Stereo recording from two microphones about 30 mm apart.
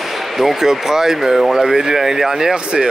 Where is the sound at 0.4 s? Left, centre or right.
Centre.